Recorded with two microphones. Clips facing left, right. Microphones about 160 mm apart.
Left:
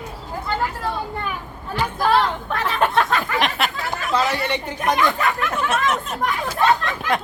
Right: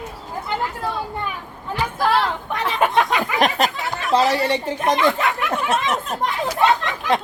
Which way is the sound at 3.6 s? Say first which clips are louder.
Right 2 dB; 40° right (ahead or behind).